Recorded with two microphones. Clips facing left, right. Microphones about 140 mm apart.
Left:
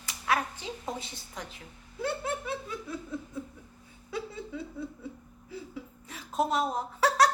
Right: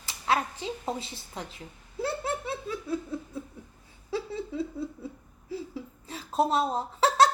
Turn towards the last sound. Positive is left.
turn(degrees=-25)  # may be behind; listen again after turning